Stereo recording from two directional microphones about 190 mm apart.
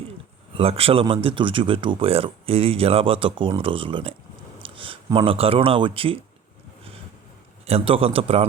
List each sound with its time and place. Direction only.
0.5 s speech: 30° right (ahead or behind)
7.7 s a man's voice: 30° right (ahead or behind)